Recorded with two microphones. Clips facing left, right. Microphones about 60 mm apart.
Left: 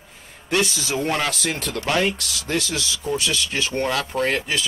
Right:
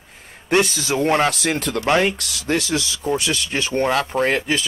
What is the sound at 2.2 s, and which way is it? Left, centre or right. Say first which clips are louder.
Speech: right 3 dB; right.